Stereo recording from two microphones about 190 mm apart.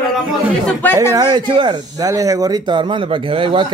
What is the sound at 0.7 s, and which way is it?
Speech, 10° left (ahead or behind).